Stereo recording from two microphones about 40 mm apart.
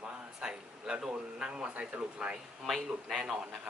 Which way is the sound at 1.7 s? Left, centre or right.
Right.